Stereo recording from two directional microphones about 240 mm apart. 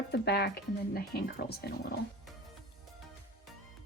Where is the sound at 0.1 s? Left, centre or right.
Left.